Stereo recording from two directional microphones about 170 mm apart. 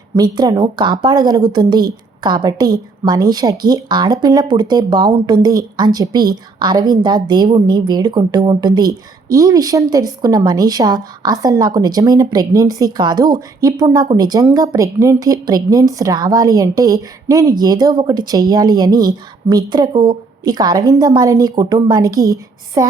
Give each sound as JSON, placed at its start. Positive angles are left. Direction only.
{"t": 0.2, "sound": "speech", "side_deg": -25}